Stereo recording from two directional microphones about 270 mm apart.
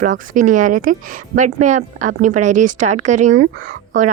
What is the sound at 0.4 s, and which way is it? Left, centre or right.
Speech, right.